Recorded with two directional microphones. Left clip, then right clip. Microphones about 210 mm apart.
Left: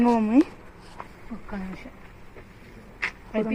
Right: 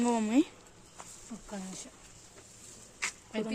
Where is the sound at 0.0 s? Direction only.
25° right (ahead or behind).